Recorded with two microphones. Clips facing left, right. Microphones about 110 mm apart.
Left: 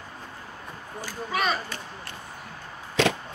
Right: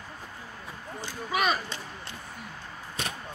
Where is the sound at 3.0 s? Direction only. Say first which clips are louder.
Left 13 dB; 90° left.